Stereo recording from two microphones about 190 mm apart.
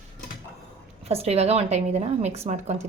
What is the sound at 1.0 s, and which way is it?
Speech, 30° right (ahead or behind).